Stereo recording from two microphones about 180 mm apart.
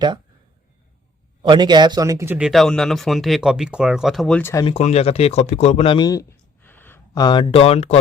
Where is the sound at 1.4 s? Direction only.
25° right (ahead or behind).